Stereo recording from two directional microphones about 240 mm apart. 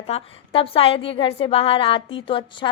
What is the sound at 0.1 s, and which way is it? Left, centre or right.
A woman's voice, left.